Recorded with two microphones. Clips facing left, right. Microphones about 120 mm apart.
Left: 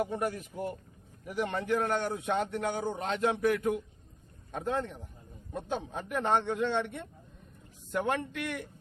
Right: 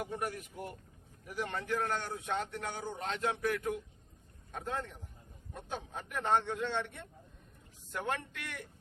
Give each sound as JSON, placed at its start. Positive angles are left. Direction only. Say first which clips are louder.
{"t": 0.0, "sound": "a man's voice", "louder": "left 6 dB", "side_deg": 30}